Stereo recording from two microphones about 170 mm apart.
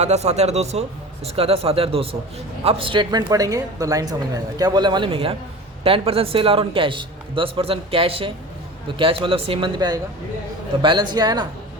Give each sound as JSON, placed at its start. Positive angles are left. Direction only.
{"t": 0.0, "sound": "a man's voice", "side_deg": -40}